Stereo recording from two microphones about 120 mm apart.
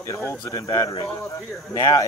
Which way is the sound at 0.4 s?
30° left (ahead or behind).